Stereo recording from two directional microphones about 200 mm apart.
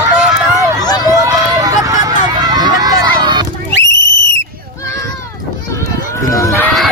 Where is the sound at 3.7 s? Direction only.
60° left (ahead or behind).